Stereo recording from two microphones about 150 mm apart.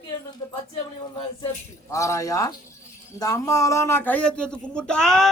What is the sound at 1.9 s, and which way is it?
A man's voice, 20° left (ahead or behind).